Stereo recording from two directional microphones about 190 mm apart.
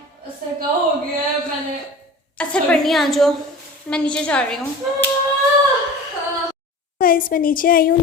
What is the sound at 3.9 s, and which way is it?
Speech, 5° left (ahead or behind).